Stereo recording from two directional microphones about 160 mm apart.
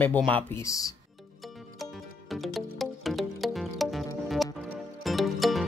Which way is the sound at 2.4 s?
Centre (ahead or behind).